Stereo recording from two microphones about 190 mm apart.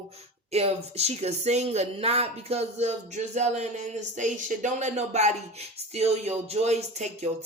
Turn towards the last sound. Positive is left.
turn(degrees=-35)  # may be behind; listen again after turning